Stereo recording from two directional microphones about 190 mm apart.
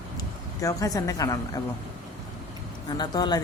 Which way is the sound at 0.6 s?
15° left (ahead or behind).